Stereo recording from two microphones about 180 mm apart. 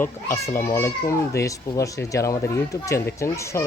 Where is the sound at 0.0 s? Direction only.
15° left (ahead or behind).